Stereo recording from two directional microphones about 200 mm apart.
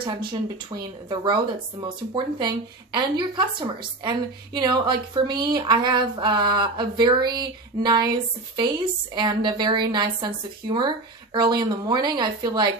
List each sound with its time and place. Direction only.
0.3 s speech: 20° right (ahead or behind)